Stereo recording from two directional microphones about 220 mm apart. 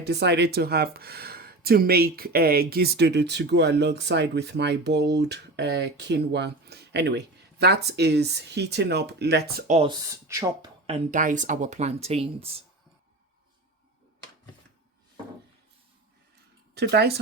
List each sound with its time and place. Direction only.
0.1 s speech: 50° right (ahead or behind)
9.6 s speech: 30° right (ahead or behind)
9.9 s speech: 15° right (ahead or behind)
16.7 s speech: 50° right (ahead or behind)